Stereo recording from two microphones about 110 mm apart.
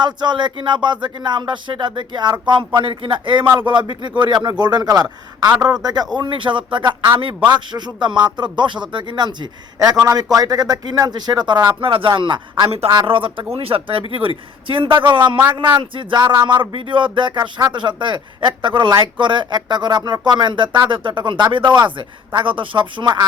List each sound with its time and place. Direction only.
0.0 s speech: 45° right (ahead or behind)
11.8 s speech: 55° right (ahead or behind)